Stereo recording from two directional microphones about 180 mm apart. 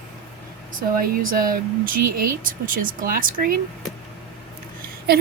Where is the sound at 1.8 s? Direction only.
55° right (ahead or behind).